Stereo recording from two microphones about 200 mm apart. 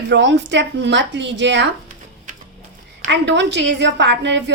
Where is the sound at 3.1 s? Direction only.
60° right (ahead or behind).